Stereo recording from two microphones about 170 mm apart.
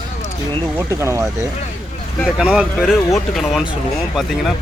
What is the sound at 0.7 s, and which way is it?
Speech, 15° right (ahead or behind).